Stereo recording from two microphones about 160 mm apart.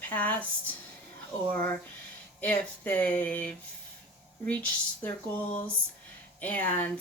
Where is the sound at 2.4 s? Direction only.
10° left (ahead or behind).